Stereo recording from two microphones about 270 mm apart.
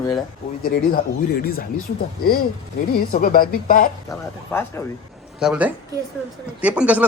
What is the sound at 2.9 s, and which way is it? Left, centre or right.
Speech, left.